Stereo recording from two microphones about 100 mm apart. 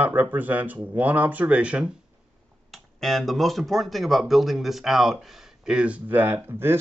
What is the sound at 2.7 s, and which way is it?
Speech, centre (ahead or behind).